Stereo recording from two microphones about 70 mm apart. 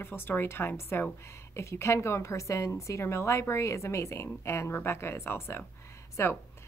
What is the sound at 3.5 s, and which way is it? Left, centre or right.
Female singing, left.